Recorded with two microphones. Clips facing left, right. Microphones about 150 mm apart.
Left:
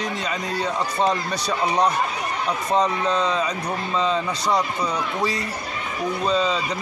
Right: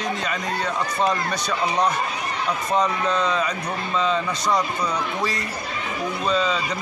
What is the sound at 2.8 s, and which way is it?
Speech, 35° left (ahead or behind).